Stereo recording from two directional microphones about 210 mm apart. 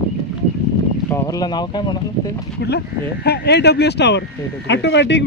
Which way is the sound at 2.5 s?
50° left (ahead or behind).